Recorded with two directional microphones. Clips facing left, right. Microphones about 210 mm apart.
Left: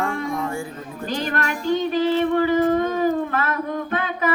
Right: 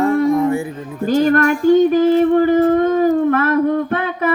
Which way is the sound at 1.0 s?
45° right (ahead or behind).